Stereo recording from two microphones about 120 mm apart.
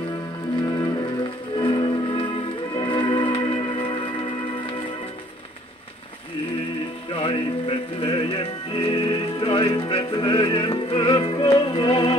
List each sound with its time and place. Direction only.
0.7 s music: 35° left (ahead or behind)
7.1 s music: 45° left (ahead or behind)